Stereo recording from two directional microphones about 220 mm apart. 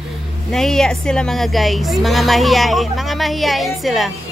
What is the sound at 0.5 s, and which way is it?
Speech, centre (ahead or behind).